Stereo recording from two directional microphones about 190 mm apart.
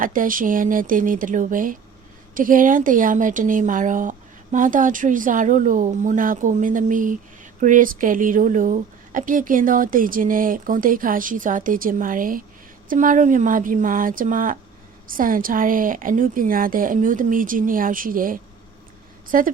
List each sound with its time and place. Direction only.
0.0 s a woman's voice: 45° right (ahead or behind)